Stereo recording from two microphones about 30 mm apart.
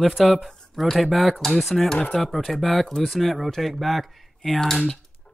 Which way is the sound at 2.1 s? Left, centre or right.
Centre.